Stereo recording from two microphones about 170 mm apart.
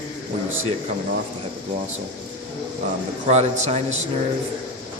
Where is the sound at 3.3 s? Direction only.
40° right (ahead or behind).